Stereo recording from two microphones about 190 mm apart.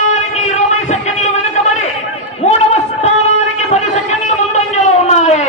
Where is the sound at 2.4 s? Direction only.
35° left (ahead or behind).